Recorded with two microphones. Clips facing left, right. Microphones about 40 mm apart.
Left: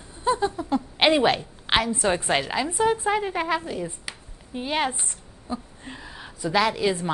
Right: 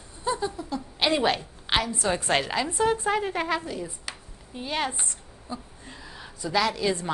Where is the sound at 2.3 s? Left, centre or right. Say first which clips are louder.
Left 1 dB; centre.